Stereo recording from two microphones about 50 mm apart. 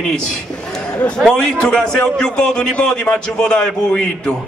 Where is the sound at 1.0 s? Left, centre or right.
Centre.